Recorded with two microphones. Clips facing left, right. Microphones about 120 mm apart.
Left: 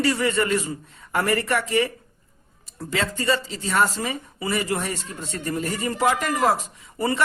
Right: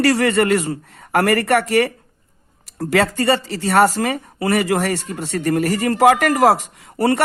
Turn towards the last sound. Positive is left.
turn(degrees=-75)  # may be behind; listen again after turning